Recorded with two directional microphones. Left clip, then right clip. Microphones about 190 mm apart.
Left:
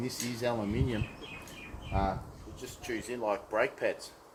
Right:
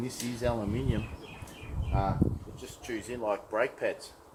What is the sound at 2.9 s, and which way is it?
Speech, 15° left (ahead or behind).